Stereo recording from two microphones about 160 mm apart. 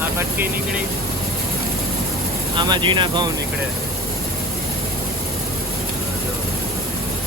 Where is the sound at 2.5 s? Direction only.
30° right (ahead or behind).